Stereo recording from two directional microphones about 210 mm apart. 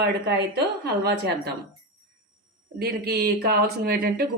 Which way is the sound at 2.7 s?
50° right (ahead or behind).